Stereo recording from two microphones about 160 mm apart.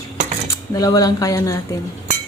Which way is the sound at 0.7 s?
25° left (ahead or behind).